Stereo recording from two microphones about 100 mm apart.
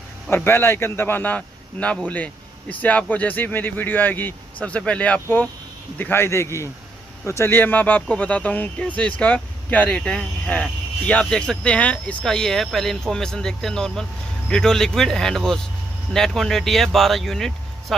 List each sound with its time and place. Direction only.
0.3 s a man's voice: 20° left (ahead or behind); by 17.9 s centre (ahead or behind)